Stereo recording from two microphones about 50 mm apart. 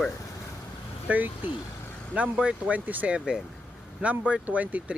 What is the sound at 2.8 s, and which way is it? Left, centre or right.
Speech, right.